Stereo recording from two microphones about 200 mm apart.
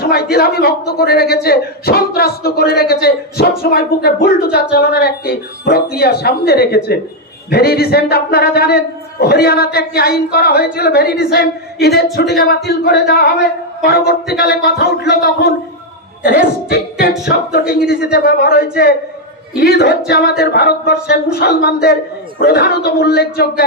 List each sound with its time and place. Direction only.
0.0 s a man's voice: 50° left (ahead or behind)